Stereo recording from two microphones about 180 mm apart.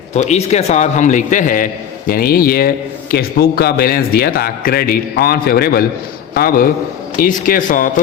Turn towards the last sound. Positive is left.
turn(degrees=50)  # may be behind; listen again after turning